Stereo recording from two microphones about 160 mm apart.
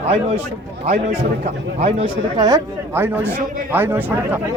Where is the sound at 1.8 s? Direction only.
40° right (ahead or behind).